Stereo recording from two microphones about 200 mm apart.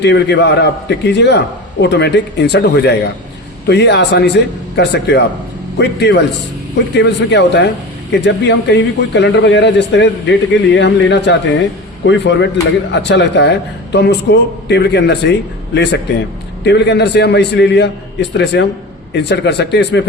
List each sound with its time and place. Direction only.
0.0 s speech: 60° left (ahead or behind)